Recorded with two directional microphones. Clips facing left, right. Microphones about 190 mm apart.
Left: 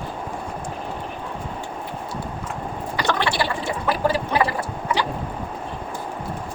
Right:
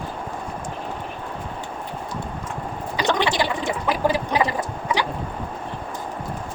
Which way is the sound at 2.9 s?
15° right (ahead or behind).